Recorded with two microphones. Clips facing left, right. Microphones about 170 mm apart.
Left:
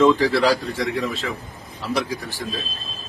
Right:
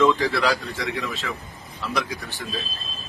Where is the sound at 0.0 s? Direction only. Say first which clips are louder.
Left 4 dB; 30° left (ahead or behind).